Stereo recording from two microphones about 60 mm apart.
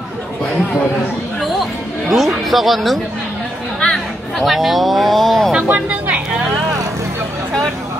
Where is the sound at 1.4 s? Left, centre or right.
Centre.